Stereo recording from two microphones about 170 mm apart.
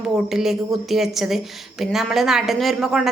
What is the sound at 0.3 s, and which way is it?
A woman's voice, centre (ahead or behind).